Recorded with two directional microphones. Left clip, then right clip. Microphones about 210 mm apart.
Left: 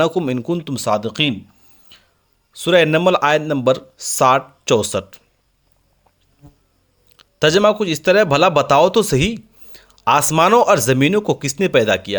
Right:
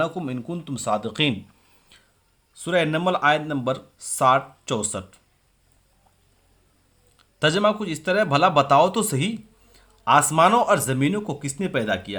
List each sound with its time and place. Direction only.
0.0 s speech: 45° left (ahead or behind)
2.5 s speech: 45° left (ahead or behind)
7.2 s speech: 40° left (ahead or behind)